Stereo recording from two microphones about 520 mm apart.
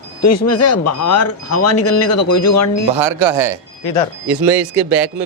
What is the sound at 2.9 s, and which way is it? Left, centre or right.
Speech, right.